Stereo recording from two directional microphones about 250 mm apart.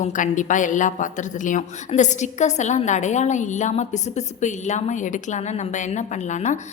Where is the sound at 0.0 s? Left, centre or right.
Left.